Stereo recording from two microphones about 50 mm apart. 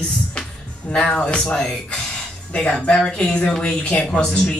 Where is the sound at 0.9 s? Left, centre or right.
Left.